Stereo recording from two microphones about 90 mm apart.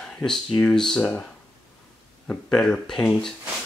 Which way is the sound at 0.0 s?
5° left (ahead or behind).